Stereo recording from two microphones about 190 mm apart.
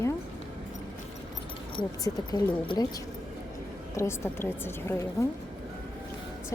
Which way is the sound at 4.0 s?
15° left (ahead or behind).